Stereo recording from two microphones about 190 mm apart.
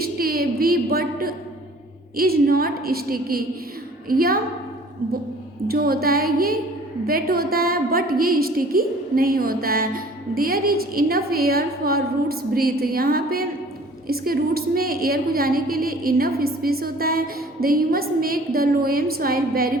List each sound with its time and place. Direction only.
0.0 s a woman's voice: 50° right (ahead or behind)
5.6 s a woman's voice: 50° right (ahead or behind)